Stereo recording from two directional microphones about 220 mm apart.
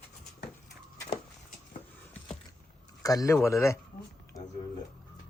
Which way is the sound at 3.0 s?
15° left (ahead or behind).